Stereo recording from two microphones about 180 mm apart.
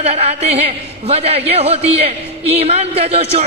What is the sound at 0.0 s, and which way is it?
A woman's voice, 35° right (ahead or behind).